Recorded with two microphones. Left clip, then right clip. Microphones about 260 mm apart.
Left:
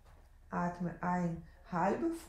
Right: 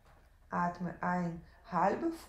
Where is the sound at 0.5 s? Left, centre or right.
Right.